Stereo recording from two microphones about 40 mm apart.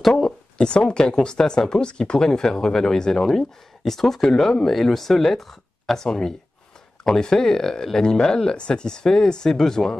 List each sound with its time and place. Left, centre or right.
0.6 s speech: left